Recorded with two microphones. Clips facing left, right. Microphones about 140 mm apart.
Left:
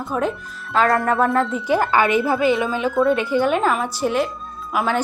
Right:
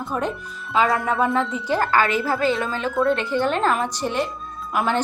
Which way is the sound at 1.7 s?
20° left (ahead or behind).